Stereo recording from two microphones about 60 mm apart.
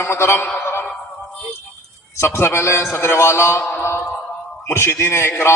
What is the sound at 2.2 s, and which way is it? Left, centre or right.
A man's voice, left.